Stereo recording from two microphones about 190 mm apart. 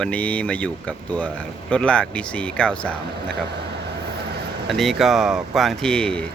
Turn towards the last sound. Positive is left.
turn(degrees=5)  # may be behind; listen again after turning